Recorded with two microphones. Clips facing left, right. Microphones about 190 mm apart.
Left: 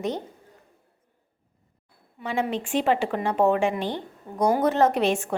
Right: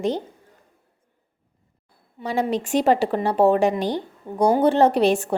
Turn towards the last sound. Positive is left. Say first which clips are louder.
# right 4 dB
turn(degrees=-35)  # may be behind; listen again after turning